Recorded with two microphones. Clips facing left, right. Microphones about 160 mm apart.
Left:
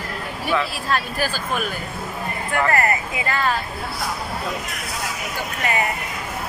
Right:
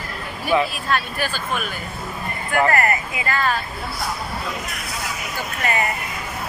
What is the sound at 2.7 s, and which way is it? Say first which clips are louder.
Speech: even; 25° left (ahead or behind).